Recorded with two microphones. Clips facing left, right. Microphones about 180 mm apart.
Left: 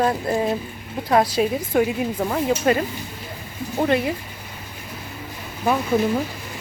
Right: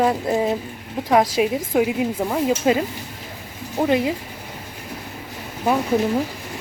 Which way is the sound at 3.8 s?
15° right (ahead or behind).